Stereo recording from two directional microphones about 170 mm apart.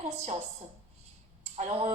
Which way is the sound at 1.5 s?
40° right (ahead or behind).